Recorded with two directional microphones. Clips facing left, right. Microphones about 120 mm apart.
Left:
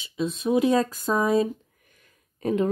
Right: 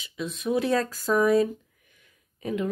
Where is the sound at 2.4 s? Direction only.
35° left (ahead or behind).